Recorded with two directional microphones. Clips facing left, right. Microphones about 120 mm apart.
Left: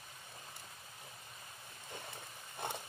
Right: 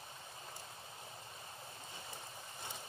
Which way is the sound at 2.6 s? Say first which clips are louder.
Left 9 dB; 60° left (ahead or behind).